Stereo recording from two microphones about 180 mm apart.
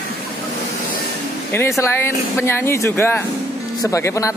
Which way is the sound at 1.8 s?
15° left (ahead or behind).